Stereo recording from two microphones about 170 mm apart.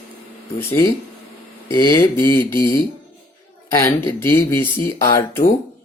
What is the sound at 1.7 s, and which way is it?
Speech, 20° left (ahead or behind).